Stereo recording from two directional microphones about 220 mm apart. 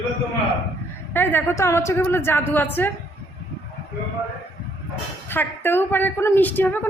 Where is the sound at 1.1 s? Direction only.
10° left (ahead or behind).